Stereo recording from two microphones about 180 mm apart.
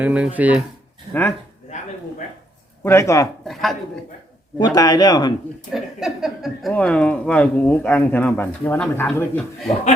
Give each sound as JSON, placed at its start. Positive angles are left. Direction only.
{"t": 0.0, "sound": "speech", "side_deg": -10}
{"t": 2.8, "sound": "speech", "side_deg": 15}
{"t": 3.4, "sound": "a woman's voice", "side_deg": 0}
{"t": 4.5, "sound": "speech", "side_deg": 25}
{"t": 5.7, "sound": "speech", "side_deg": 0}